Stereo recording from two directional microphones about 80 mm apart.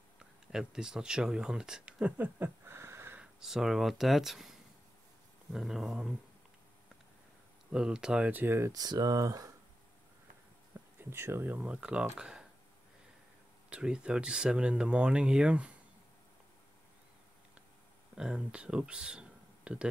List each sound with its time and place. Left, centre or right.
0.5 s speech: centre; by 3.2 s right
3.2 s speech: centre
7.7 s speech: centre
8.3 s speech: right
8.7 s speech: right
11.0 s speech: right; by 12.4 s centre
13.7 s speech: centre
18.1 s speech: centre